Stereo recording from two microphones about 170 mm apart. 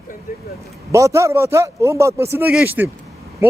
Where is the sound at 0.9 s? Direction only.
15° right (ahead or behind).